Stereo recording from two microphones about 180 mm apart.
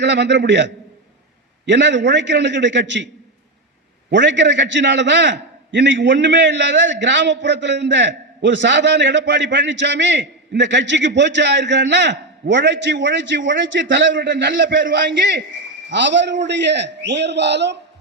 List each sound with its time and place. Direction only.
0.0 s a man's voice: 75° right (ahead or behind)
4.1 s a man's voice: 80° right
14.9 s a man's voice: 75° right (ahead or behind)